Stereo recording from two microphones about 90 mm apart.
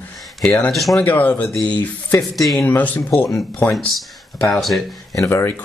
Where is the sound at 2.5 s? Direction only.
20° left (ahead or behind).